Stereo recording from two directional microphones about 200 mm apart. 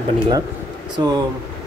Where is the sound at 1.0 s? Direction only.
20° right (ahead or behind).